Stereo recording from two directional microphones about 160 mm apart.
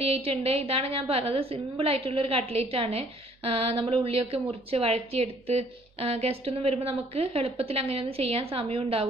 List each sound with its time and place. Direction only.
0.0 s a woman's voice: 40° right (ahead or behind)